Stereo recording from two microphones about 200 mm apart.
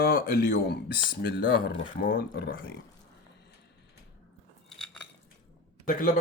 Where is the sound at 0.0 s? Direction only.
45° left (ahead or behind).